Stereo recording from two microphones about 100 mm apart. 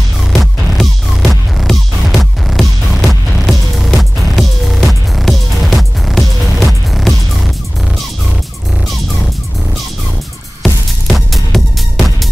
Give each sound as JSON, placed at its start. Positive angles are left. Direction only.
{"t": 0.3, "sound": "music", "side_deg": 0}
{"t": 10.6, "sound": "music", "side_deg": 0}